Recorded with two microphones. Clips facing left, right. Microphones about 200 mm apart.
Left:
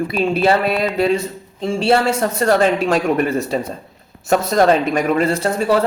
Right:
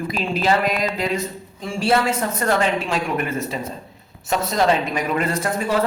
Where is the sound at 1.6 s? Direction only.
25° left (ahead or behind).